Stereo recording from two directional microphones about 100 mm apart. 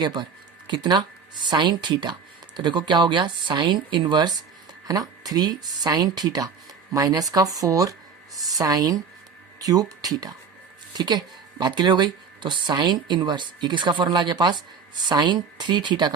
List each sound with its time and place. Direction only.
0.0 s speech: 50° right (ahead or behind)